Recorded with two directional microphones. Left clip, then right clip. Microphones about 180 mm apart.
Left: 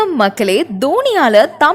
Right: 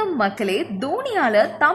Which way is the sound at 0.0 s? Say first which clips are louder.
Left 8 dB; 35° left (ahead or behind).